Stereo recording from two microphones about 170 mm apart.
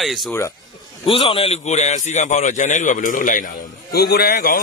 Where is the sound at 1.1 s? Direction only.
35° left (ahead or behind); by 3.5 s 50° left (ahead or behind).